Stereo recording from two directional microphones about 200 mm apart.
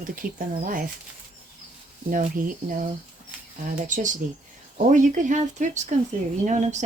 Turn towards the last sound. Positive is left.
turn(degrees=-35)  # may be behind; listen again after turning